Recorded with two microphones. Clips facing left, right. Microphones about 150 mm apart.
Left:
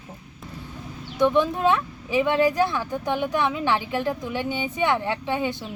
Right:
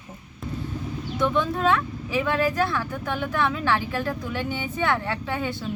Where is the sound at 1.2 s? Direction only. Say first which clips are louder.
Left 4 dB; 15° left (ahead or behind).